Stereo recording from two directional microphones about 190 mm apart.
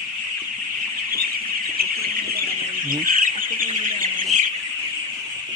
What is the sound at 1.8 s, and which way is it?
Chicken, 55° right (ahead or behind).